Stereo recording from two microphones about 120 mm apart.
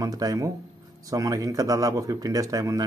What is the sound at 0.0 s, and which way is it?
Speech, 30° right (ahead or behind).